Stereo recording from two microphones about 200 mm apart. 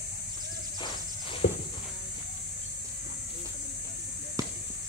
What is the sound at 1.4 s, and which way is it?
Walk, 55° left (ahead or behind).